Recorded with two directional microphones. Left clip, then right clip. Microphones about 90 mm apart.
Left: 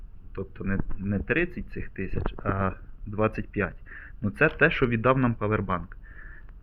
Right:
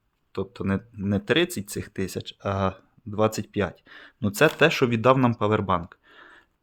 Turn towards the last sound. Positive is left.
turn(degrees=-55)  # may be behind; listen again after turning